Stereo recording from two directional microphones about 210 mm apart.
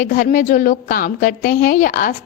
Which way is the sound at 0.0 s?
40° left (ahead or behind).